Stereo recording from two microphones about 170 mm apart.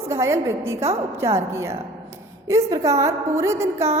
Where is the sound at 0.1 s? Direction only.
15° right (ahead or behind).